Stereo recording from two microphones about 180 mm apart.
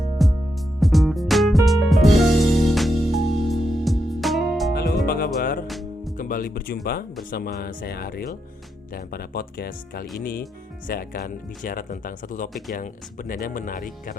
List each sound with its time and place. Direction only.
0.2 s music: centre (ahead or behind)
5.0 s music: 55° left (ahead or behind)
5.6 s music: centre (ahead or behind)
6.1 s speech: 50° left (ahead or behind)